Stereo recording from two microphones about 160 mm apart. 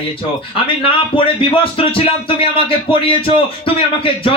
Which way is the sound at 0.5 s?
35° left (ahead or behind).